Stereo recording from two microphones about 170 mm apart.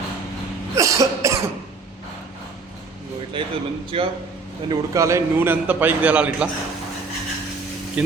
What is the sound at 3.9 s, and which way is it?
Speech, 35° right (ahead or behind).